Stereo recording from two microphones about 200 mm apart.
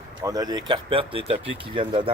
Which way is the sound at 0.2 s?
15° right (ahead or behind).